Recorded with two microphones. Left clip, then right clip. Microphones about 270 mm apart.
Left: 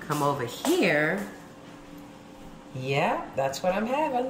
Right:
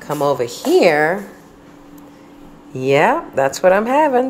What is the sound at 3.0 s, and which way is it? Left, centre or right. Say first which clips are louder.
Speech: right 11 dB; right.